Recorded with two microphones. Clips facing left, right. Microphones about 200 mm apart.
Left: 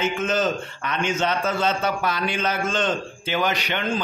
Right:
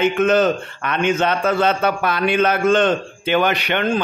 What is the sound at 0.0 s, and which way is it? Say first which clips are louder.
A man's voice: right 7 dB; 60° right (ahead or behind).